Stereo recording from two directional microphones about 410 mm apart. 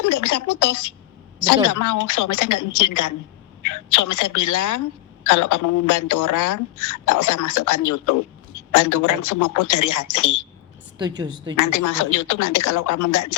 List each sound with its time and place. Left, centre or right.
0.0 s speech: left
1.7 s a woman's voice: left
10.9 s a woman's voice: centre
11.5 s speech: left